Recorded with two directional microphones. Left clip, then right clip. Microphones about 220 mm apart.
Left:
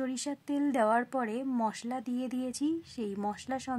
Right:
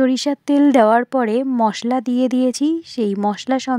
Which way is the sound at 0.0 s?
35° right (ahead or behind).